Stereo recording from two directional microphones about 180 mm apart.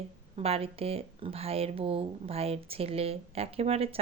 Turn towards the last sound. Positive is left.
turn(degrees=-35)  # may be behind; listen again after turning